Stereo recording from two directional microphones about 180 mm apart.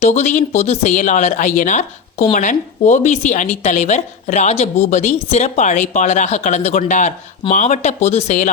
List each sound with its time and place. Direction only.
0.0 s a woman's voice: 40° left (ahead or behind)